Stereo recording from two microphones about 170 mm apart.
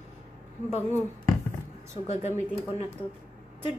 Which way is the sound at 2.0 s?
40° left (ahead or behind).